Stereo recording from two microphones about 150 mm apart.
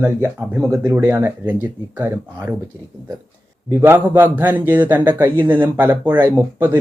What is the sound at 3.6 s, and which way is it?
Speech, 15° right (ahead or behind).